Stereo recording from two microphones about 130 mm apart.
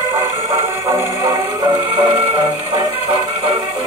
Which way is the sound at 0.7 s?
20° right (ahead or behind).